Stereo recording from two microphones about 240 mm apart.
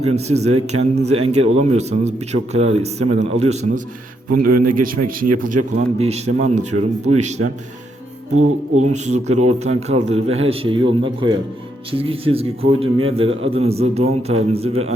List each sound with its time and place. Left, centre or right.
0.0 s speech: right
4.3 s a man's voice: right
5.7 s speech: right
8.8 s speech: right